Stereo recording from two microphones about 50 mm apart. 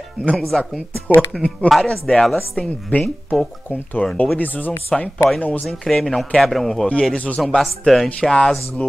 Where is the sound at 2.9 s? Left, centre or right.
Left.